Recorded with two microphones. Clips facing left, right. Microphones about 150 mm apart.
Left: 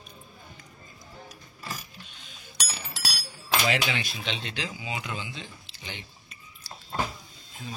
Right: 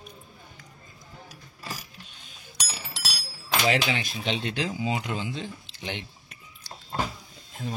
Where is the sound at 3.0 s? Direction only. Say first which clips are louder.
Left 1 dB; centre (ahead or behind).